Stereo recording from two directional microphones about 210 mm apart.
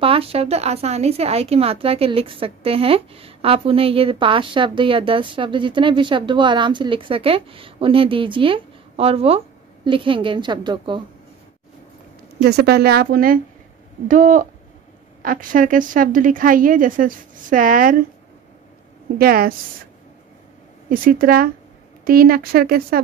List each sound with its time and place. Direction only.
0.0 s speech: 25° right (ahead or behind)
12.4 s a woman's voice: 50° right (ahead or behind)
19.1 s a woman's voice: 45° right (ahead or behind)
20.9 s a woman's voice: 40° right (ahead or behind)